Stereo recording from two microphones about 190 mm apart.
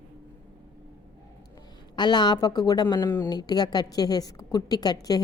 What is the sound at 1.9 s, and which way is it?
Speech, 25° left (ahead or behind).